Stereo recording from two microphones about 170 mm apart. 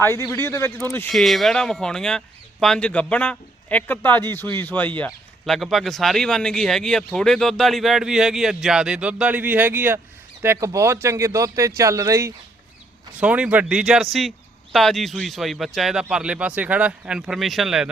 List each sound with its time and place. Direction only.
0.0 s speech: 15° left (ahead or behind)
1.1 s speech: centre (ahead or behind); by 12.3 s 20° right (ahead or behind)
13.1 s speech: 10° right (ahead or behind)